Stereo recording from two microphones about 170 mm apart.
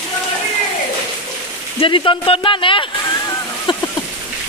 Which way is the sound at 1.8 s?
30° left (ahead or behind).